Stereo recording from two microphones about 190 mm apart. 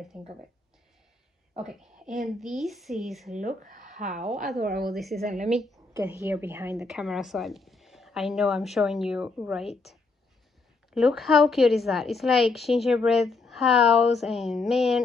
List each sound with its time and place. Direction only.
0.1 s a woman's voice: 5° right (ahead or behind)
1.6 s a woman's voice: 5° right (ahead or behind)
3.3 s speech: 45° right (ahead or behind)
4.1 s a woman's voice: centre (ahead or behind)
4.6 s speech: 50° right (ahead or behind)
4.8 s a woman's voice: centre (ahead or behind)
5.2 s a woman's voice: 35° right (ahead or behind)
5.9 s a woman's voice: 15° right (ahead or behind)
6.8 s a woman's voice: centre (ahead or behind)
10.9 s a woman's voice: centre (ahead or behind)